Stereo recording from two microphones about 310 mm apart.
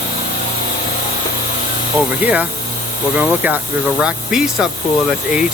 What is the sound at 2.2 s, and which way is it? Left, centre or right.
Speech, centre.